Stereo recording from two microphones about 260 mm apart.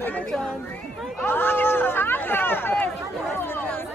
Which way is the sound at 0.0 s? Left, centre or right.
Centre.